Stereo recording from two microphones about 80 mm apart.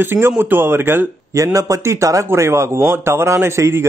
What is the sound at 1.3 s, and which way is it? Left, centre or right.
A man's voice, right.